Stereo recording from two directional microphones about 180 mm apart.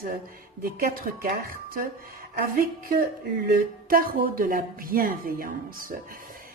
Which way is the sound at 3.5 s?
55° right (ahead or behind).